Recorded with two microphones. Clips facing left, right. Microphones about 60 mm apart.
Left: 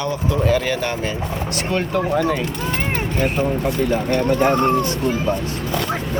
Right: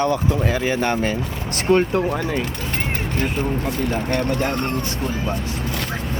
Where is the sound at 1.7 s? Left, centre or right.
Right.